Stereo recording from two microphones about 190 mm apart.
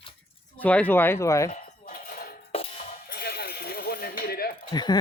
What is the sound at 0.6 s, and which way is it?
Speech, 5° left (ahead or behind).